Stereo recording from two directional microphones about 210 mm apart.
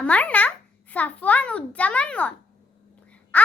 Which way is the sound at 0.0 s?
5° left (ahead or behind).